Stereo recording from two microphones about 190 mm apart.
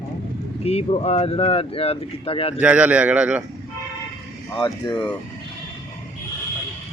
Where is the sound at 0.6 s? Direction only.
30° left (ahead or behind).